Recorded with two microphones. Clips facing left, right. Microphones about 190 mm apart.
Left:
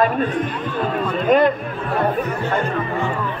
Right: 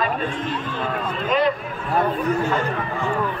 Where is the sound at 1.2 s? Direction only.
50° left (ahead or behind).